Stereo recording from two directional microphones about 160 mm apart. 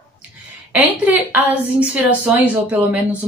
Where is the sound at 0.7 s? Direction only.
10° right (ahead or behind).